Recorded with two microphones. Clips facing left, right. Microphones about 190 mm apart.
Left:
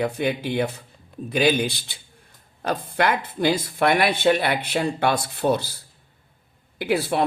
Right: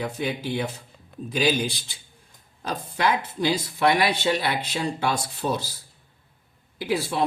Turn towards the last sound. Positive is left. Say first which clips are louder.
# left 3 dB
turn(degrees=60)  # may be behind; listen again after turning